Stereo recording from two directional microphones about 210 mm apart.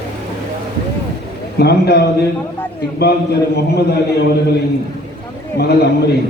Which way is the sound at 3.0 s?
50° left (ahead or behind).